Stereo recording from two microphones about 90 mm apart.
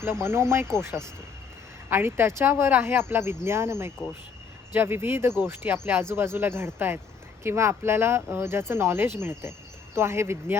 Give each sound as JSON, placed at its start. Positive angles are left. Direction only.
{"t": 0.0, "sound": "speech", "side_deg": -25}